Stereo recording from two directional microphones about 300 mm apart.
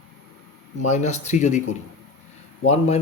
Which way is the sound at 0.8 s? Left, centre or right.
Left.